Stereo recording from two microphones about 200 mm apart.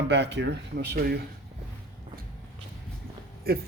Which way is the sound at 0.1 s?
60° right (ahead or behind).